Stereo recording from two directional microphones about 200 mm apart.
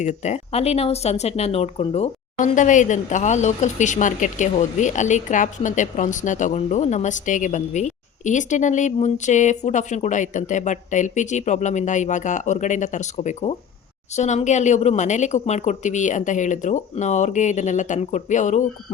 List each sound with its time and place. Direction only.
0.0 s speech: 35° left (ahead or behind)